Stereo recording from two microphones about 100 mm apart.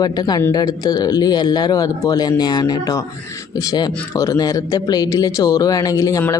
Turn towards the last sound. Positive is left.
turn(degrees=35)  # may be behind; listen again after turning